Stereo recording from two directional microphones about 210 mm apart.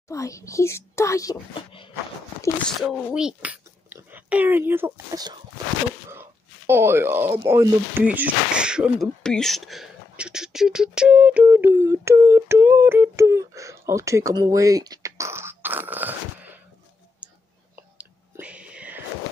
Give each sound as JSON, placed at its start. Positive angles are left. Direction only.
{"t": 0.1, "sound": "speech", "side_deg": 15}
{"t": 2.9, "sound": "speech", "side_deg": -5}
{"t": 6.0, "sound": "a sound", "side_deg": -15}
{"t": 7.4, "sound": "speech", "side_deg": -10}
{"t": 17.2, "sound": "whispering", "side_deg": -5}